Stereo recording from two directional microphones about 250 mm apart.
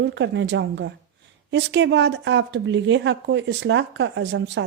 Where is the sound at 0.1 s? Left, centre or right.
Right.